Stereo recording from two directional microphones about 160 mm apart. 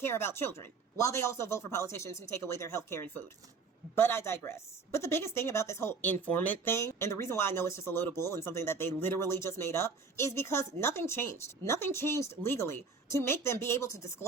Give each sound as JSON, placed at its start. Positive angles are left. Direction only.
{"t": 0.0, "sound": "a woman's voice", "side_deg": 15}